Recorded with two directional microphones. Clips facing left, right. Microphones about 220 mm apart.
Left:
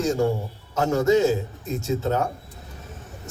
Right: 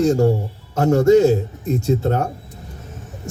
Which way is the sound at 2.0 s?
50° right (ahead or behind).